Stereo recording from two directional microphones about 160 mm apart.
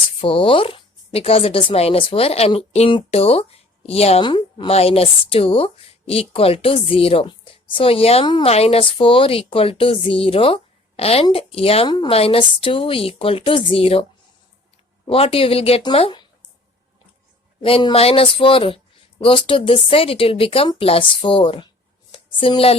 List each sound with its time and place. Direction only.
0.2 s a woman's voice: 35° left (ahead or behind)
15.0 s a woman's voice: 35° left (ahead or behind)
17.6 s a woman's voice: 35° left (ahead or behind)
22.1 s a sound: 35° left (ahead or behind)